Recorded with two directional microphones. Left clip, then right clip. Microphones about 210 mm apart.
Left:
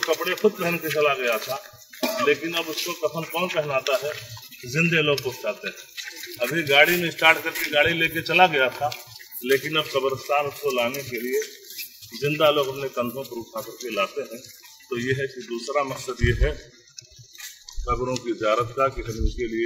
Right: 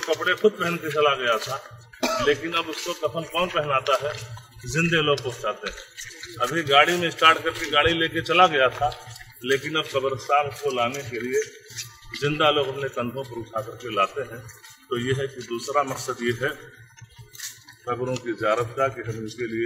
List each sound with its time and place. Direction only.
0.1 s speech: 10° right (ahead or behind)
2.0 s music: 10° left (ahead or behind)
2.2 s speech: 10° right (ahead or behind)
12.2 s speech: 10° right (ahead or behind)
17.8 s speech: 5° left (ahead or behind)